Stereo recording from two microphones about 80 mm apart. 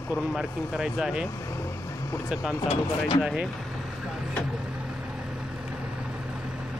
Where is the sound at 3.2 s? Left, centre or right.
Centre.